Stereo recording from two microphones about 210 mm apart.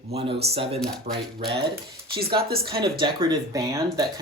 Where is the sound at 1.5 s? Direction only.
45° right (ahead or behind).